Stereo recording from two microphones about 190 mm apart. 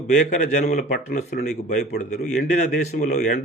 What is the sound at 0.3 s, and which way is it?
Speech, 40° left (ahead or behind).